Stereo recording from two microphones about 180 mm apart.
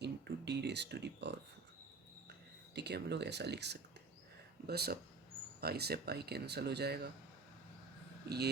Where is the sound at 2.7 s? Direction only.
70° right (ahead or behind).